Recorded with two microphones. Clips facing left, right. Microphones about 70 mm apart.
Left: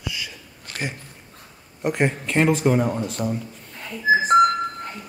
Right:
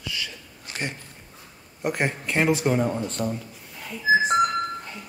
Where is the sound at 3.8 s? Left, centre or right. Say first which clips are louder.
Left 1 dB; left.